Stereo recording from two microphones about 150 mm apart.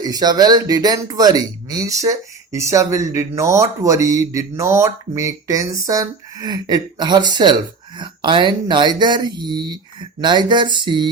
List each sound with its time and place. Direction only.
0.0 s speech: 25° right (ahead or behind)